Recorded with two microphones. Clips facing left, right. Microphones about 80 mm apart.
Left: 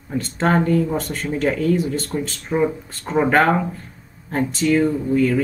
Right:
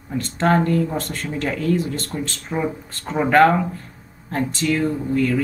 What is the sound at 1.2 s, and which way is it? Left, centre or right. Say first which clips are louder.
Speech: left 6 dB; left.